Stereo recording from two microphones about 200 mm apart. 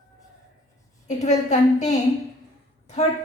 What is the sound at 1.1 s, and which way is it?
Speech, 35° left (ahead or behind).